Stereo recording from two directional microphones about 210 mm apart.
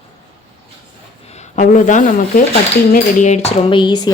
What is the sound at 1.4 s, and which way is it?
A woman's voice, 35° left (ahead or behind).